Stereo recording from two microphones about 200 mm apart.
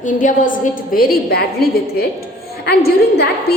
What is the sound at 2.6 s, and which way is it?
Speech, 55° left (ahead or behind).